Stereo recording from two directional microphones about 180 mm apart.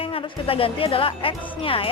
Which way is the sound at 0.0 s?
30° left (ahead or behind).